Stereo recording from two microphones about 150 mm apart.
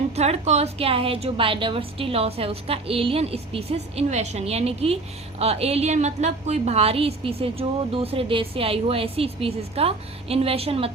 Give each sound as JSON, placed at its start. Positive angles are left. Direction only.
{"t": 0.2, "sound": "a woman's voice", "side_deg": -45}